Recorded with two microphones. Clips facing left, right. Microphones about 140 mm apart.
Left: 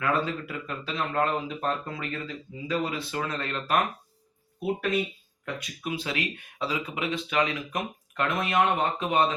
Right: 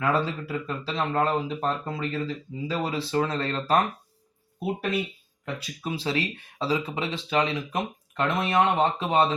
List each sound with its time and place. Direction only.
0.0 s speech: 30° right (ahead or behind)
5.5 s speech: 30° right (ahead or behind)